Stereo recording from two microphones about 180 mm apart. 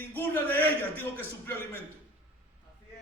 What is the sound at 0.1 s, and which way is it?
A man's voice, 10° left (ahead or behind).